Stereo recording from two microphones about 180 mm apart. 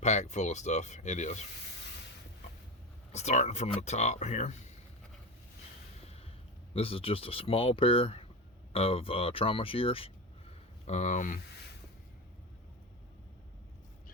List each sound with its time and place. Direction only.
0.0 s speech: 40° left (ahead or behind)
3.1 s speech: 40° left (ahead or behind)
6.7 s speech: 30° left (ahead or behind)